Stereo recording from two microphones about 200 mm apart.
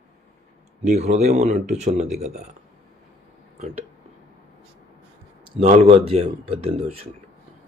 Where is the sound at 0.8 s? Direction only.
35° right (ahead or behind).